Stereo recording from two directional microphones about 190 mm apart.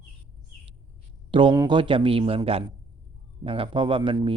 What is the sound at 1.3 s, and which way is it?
Speech, 25° right (ahead or behind).